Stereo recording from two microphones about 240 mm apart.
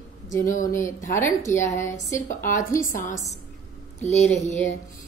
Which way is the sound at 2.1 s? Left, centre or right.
Left.